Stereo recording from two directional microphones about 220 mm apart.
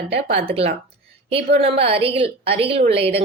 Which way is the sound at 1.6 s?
25° right (ahead or behind).